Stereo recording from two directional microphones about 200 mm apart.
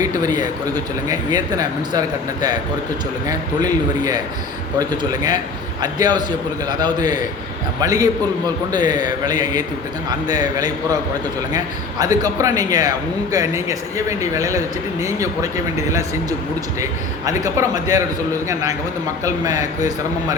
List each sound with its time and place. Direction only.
0.0 s a sound: 20° right (ahead or behind)
0.7 s a man's voice: 20° right (ahead or behind)
17.2 s a man's voice: 15° right (ahead or behind)